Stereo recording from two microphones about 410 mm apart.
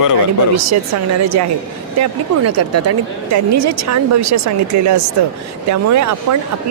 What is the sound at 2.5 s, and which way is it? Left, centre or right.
Speech, right.